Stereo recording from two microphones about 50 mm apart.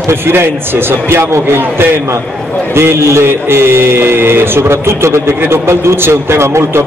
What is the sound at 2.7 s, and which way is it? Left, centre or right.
A man's voice, right.